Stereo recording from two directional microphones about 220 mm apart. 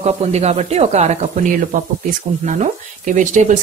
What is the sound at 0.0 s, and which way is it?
Speech, 30° right (ahead or behind).